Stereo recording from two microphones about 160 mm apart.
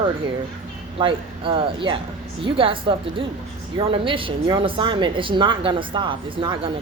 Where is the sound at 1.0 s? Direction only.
35° right (ahead or behind).